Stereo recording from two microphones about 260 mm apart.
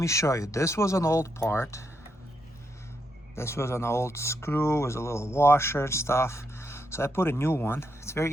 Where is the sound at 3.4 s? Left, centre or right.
Centre.